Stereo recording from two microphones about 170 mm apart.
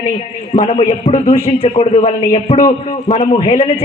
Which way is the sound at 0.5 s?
45° left (ahead or behind).